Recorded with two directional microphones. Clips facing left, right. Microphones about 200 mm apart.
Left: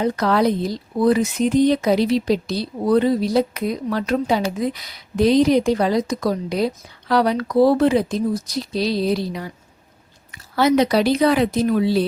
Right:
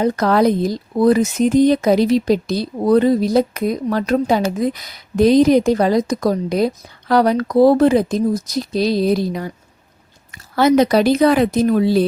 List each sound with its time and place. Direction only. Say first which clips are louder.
0.0 s speech: right 3 dB; 45° right (ahead or behind)
10.5 s speech: right 3 dB; 50° right (ahead or behind)